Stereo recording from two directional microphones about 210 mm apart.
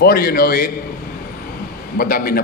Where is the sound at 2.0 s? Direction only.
45° left (ahead or behind).